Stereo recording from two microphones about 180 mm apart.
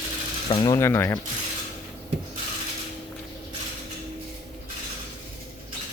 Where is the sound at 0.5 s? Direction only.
25° left (ahead or behind).